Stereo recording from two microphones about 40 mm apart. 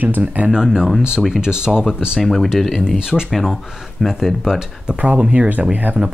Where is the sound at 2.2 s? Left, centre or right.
Centre.